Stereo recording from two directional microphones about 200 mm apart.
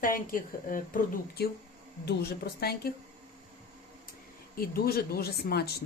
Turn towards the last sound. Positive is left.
turn(degrees=55)  # may be behind; listen again after turning